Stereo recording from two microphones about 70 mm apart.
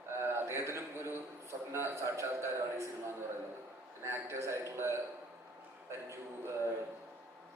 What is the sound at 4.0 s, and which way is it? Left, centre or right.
Speech, right.